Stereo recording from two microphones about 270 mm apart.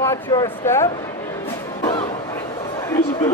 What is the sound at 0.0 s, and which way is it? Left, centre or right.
Speech, centre.